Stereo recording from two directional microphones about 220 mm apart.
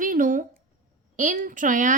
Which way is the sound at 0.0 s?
40° right (ahead or behind).